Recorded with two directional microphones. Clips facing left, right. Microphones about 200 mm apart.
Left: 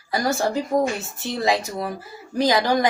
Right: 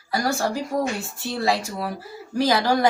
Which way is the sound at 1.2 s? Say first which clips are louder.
Left 1 dB; 20° left (ahead or behind).